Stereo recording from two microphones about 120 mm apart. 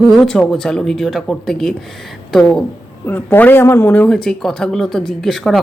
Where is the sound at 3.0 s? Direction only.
15° left (ahead or behind).